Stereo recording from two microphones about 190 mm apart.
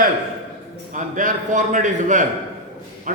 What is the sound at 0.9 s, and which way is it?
A man's voice, 45° right (ahead or behind).